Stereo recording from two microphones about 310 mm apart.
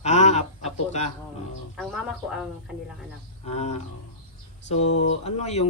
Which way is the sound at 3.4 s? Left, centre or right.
Left.